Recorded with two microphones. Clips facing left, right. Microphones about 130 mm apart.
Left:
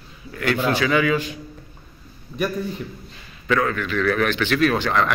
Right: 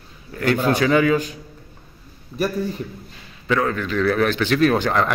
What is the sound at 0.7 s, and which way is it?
Speech, 40° right (ahead or behind).